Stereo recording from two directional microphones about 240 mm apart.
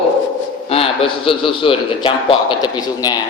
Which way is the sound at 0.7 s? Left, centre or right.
Left.